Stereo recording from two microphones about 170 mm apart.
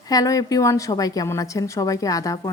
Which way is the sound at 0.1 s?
20° left (ahead or behind).